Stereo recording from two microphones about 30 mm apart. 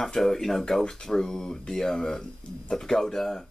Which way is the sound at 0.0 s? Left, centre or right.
Centre.